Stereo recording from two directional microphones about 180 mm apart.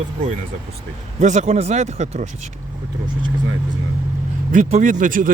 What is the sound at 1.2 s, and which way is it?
A man's voice, 40° right (ahead or behind).